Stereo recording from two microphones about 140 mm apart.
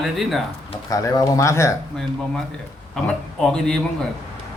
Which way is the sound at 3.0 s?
5° left (ahead or behind).